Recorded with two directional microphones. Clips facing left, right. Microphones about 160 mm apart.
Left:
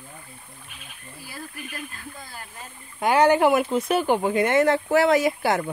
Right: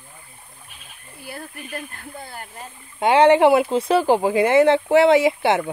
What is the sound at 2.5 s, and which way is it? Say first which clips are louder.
Speech: right 4 dB; 25° right (ahead or behind).